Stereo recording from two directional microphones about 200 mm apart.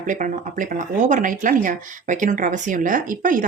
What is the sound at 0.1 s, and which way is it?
Speech, 40° right (ahead or behind).